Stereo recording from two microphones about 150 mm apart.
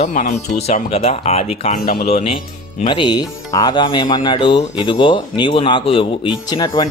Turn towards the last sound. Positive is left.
turn(degrees=25)  # may be behind; listen again after turning